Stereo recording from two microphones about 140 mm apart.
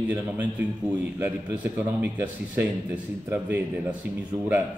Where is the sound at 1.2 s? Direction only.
15° right (ahead or behind).